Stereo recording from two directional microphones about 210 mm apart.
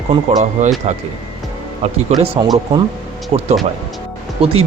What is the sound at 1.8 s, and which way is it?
Speech, 30° right (ahead or behind).